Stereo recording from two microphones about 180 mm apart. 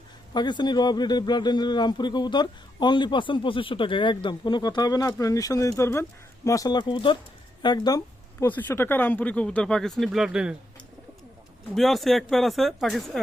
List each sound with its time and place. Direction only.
0.3 s speech: 25° left (ahead or behind); by 10.5 s 5° right (ahead or behind)
11.7 s speech: centre (ahead or behind)